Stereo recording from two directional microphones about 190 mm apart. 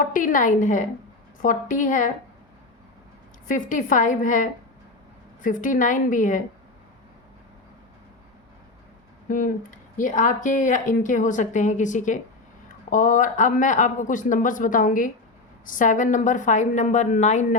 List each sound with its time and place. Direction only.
0.0 s speech: 45° left (ahead or behind)
3.5 s speech: 45° left (ahead or behind)
9.3 s speech: 45° left (ahead or behind)